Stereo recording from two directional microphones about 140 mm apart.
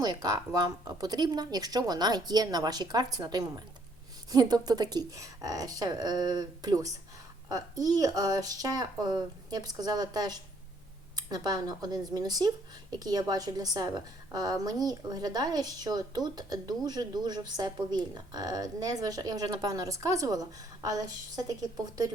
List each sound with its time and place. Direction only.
0.0 s a woman's voice: 30° right (ahead or behind)